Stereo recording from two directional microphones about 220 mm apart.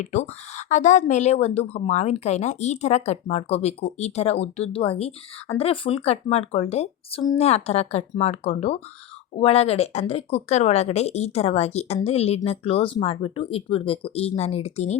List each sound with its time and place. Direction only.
0.0 s a woman's voice: 30° left (ahead or behind)